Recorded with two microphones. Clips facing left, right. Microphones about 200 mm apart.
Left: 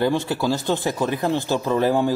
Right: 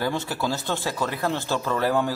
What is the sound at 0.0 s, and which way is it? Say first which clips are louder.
Speech: left 5 dB; 15° left (ahead or behind).